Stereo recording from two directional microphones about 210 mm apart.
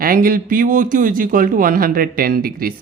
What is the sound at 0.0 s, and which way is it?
Speech, 45° right (ahead or behind).